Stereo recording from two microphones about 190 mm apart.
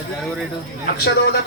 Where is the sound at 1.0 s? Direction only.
55° left (ahead or behind).